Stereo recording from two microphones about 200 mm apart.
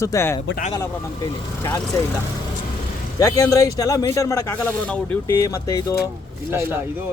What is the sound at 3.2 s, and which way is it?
Speech, 15° left (ahead or behind).